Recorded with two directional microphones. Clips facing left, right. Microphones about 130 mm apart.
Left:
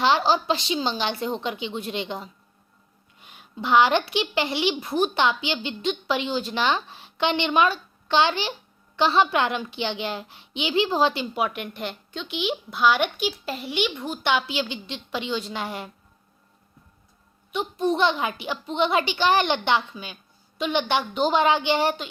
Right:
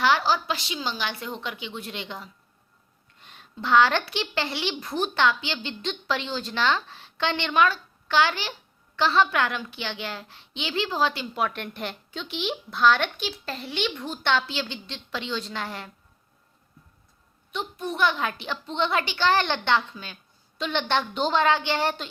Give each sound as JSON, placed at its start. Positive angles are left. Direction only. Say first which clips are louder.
{"t": 0.0, "sound": "a woman's voice", "louder": "left 2 dB", "side_deg": 20}
{"t": 3.2, "sound": "a child's voice", "louder": "left 3 dB", "side_deg": 10}
{"t": 17.5, "sound": "a child's voice", "louder": "left 7 dB", "side_deg": 20}